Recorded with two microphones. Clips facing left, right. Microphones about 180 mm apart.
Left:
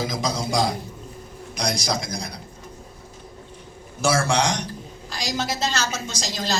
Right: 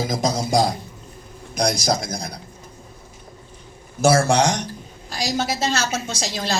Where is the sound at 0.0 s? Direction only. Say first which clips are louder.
Right 3 dB; 50° right (ahead or behind).